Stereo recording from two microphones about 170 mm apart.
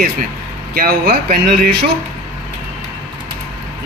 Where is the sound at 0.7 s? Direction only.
65° right (ahead or behind).